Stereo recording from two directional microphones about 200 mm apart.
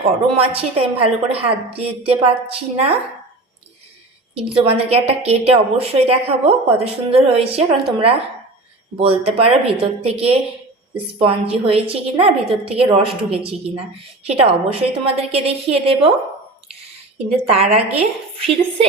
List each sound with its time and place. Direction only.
0.0 s a woman's voice: 30° right (ahead or behind)
4.5 s a woman's voice: 30° right (ahead or behind)
17.2 s a woman's voice: 30° right (ahead or behind)